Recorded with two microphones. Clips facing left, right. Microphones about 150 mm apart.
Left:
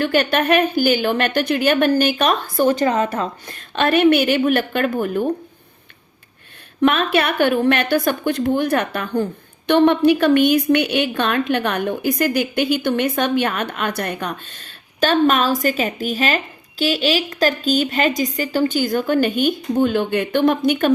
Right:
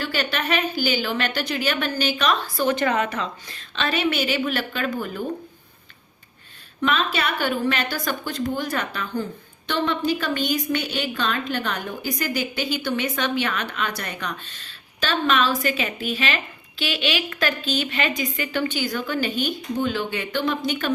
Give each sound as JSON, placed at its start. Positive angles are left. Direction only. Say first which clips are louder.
{"t": 0.0, "sound": "speech", "louder": "left 9 dB", "side_deg": 55}
{"t": 6.8, "sound": "a woman's voice", "louder": "left 7 dB", "side_deg": 60}